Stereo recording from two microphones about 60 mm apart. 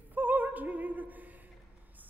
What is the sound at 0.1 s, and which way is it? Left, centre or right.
Opera, right.